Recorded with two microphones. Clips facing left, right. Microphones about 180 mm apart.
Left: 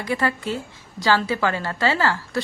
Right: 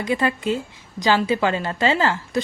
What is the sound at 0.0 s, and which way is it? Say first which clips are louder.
A woman's voice: right 2 dB; 20° right (ahead or behind).